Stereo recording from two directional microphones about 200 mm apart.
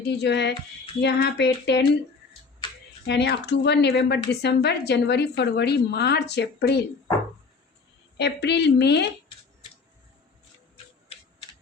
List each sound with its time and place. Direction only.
0.0 s a woman's voice: 55° left (ahead or behind)
3.1 s a woman's voice: 55° left (ahead or behind)
8.2 s a woman's voice: 55° left (ahead or behind)